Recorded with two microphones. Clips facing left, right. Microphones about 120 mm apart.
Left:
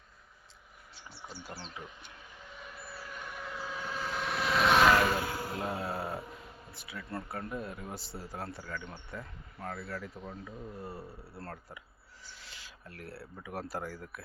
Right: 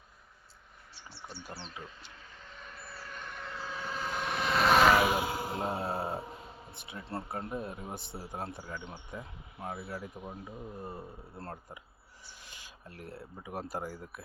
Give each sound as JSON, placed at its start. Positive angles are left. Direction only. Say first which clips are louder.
{"t": 1.8, "sound": "vehicle", "louder": "even", "side_deg": 15}
{"t": 8.1, "sound": "speech", "louder": "right 2 dB", "side_deg": -20}